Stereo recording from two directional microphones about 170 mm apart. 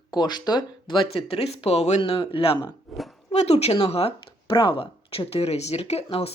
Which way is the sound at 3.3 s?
40° left (ahead or behind).